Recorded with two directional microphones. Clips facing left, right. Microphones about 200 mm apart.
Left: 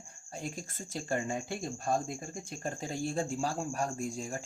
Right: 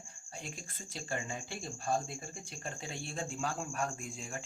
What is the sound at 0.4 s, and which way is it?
Speech, 45° left (ahead or behind).